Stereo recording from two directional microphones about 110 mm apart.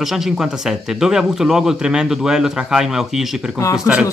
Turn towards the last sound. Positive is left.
turn(degrees=-10)  # may be behind; listen again after turning